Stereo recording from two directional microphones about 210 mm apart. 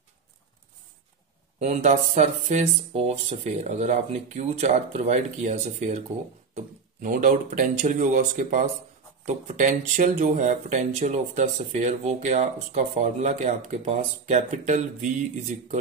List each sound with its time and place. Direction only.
1.6 s speech: 35° right (ahead or behind)